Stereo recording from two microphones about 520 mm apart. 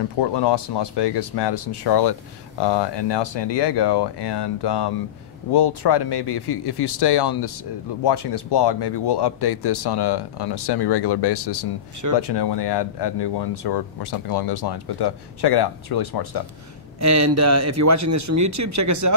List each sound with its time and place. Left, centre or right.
0.2 s speech: left
17.0 s a man's voice: right